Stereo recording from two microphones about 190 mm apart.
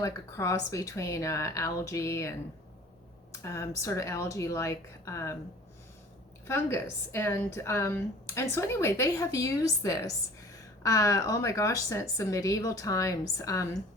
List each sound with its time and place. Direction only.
0.0 s a woman's voice: 15° left (ahead or behind)
3.4 s a woman's voice: 15° left (ahead or behind)
6.5 s a woman's voice: 15° left (ahead or behind)